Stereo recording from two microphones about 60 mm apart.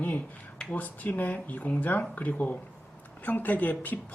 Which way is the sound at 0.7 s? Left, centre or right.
Left.